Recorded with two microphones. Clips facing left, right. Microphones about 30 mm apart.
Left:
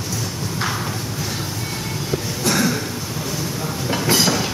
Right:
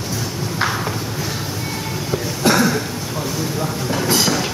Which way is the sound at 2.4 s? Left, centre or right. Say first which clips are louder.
Right 5 dB; right.